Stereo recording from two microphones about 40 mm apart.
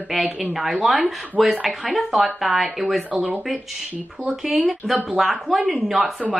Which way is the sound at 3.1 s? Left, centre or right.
Right.